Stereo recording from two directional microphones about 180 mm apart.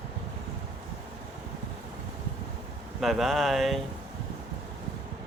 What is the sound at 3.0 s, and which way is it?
Speech, centre (ahead or behind).